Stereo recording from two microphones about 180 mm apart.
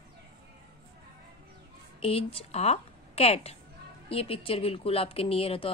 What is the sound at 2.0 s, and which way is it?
Speech, 30° left (ahead or behind).